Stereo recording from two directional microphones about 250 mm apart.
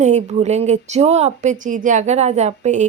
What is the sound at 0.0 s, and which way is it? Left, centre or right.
Speech, right.